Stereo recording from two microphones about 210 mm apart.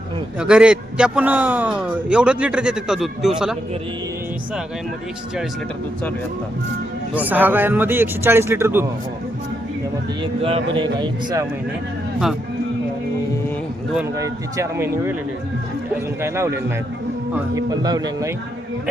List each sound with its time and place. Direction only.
0.3 s a man's voice: 5° right (ahead or behind)
7.1 s speech: 5° right (ahead or behind)
10.4 s speech: 25° right (ahead or behind)
13.9 s speech: 10° right (ahead or behind)